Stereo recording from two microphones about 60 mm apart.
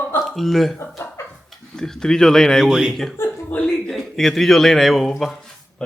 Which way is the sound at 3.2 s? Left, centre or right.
Left.